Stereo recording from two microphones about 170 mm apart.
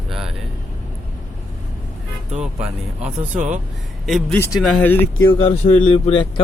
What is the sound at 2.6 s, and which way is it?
Speech, 40° right (ahead or behind).